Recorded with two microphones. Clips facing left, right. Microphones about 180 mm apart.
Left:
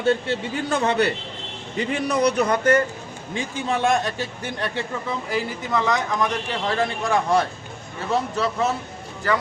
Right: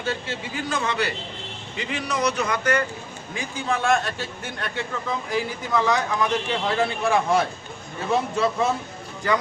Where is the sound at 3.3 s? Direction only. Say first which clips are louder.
Left 2 dB; 20° left (ahead or behind).